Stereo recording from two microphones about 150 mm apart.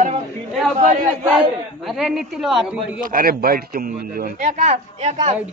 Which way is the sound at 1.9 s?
Centre (ahead or behind).